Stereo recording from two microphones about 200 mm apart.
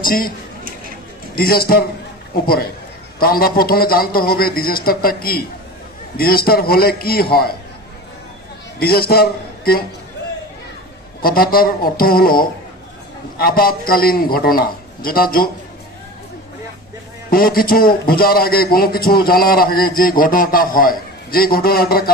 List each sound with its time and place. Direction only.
0.0 s speech: 45° left (ahead or behind)
1.3 s a man's voice: 50° left (ahead or behind)
3.2 s a man's voice: 45° left (ahead or behind)
8.7 s a man's voice: 50° left (ahead or behind)
11.2 s a man's voice: 45° left (ahead or behind)
17.3 s a man's voice: 45° left (ahead or behind)